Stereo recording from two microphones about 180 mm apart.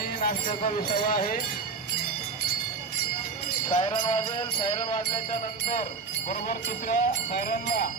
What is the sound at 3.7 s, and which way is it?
Music, 30° left (ahead or behind).